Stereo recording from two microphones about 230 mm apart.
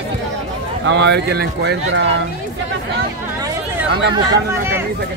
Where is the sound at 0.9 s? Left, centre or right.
Right.